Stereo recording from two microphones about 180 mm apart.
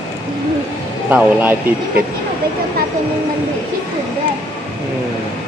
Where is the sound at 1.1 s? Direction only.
10° right (ahead or behind).